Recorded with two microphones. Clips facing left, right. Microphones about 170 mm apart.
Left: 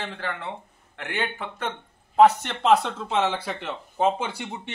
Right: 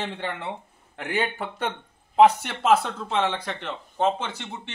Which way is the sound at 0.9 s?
35° right (ahead or behind).